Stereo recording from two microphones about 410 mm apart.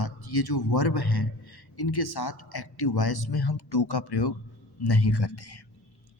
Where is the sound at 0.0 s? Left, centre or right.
Left.